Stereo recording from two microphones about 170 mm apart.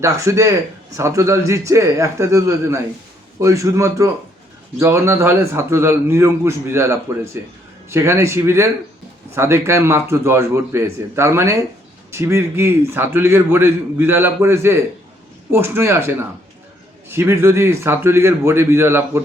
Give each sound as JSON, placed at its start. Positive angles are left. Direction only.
{"t": 0.0, "sound": "a man's voice", "side_deg": -20}